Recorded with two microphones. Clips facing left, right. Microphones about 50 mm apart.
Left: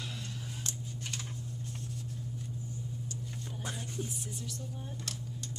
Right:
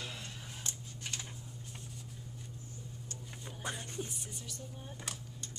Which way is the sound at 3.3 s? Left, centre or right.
Centre.